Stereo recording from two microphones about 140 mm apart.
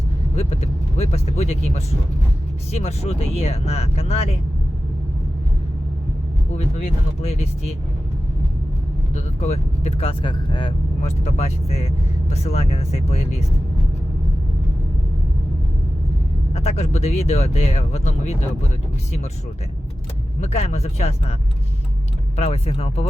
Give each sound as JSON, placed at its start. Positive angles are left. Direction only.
{"t": 0.3, "sound": "speech", "side_deg": 45}
{"t": 6.6, "sound": "speech", "side_deg": 50}
{"t": 9.1, "sound": "speech", "side_deg": 50}
{"t": 11.0, "sound": "speech", "side_deg": 50}
{"t": 16.5, "sound": "speech", "side_deg": 50}
{"t": 20.4, "sound": "speech", "side_deg": 50}
{"t": 22.4, "sound": "speech", "side_deg": 45}